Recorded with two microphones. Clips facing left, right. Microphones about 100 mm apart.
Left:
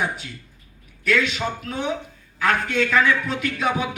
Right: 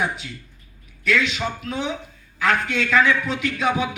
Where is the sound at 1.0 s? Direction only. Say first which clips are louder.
Even; 45° left (ahead or behind).